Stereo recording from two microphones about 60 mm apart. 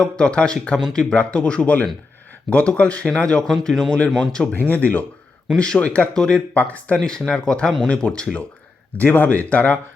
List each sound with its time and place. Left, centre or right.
0.0 s speech: centre
3.5 s speech: centre
4.5 s speech: left
5.5 s speech: centre
6.6 s speech: left
7.0 s speech: centre
9.0 s speech: left